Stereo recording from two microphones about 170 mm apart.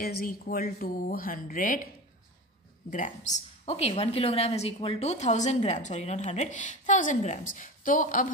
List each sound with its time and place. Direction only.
0.0 s speech: 65° left (ahead or behind)
2.9 s a woman's voice: 45° left (ahead or behind)